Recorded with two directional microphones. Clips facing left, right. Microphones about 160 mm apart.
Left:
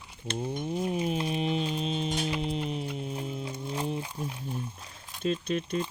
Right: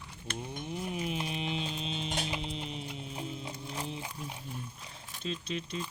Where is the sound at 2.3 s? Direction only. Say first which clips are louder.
Left 7 dB; 50° left (ahead or behind).